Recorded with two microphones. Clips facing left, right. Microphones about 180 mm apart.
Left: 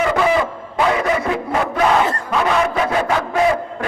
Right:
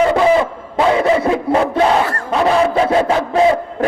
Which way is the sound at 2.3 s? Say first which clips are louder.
Right 6 dB; 30° right (ahead or behind).